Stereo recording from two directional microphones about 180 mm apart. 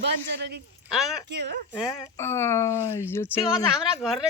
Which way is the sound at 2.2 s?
15° left (ahead or behind).